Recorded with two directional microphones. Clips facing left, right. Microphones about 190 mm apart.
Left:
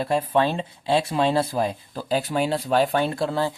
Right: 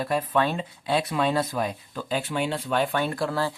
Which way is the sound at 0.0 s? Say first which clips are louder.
Left 3 dB; 25° left (ahead or behind).